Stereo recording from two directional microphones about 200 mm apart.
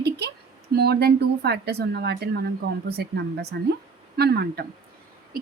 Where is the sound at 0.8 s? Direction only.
55° right (ahead or behind).